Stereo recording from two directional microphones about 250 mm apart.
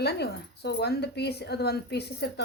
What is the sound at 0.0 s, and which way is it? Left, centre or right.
Speech, left.